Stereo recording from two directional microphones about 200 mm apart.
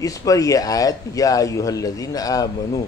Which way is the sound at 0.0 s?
15° left (ahead or behind).